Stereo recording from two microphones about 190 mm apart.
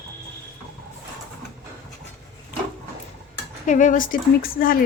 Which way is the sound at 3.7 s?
40° left (ahead or behind).